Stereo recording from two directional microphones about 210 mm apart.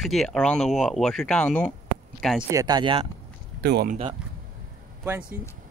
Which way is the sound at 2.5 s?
15° right (ahead or behind).